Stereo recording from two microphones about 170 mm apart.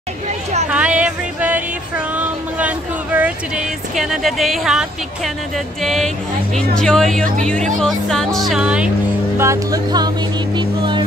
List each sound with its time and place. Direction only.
0.7 s music: 5° right (ahead or behind)
5.8 s speech: centre (ahead or behind)
9.4 s speech: 20° right (ahead or behind)